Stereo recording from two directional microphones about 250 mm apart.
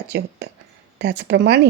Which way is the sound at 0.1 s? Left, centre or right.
Right.